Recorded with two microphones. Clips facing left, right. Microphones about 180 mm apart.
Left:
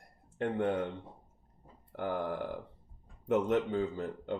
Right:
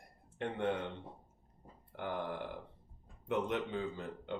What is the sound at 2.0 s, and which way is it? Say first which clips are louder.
Speech: left 5 dB; 45° left (ahead or behind).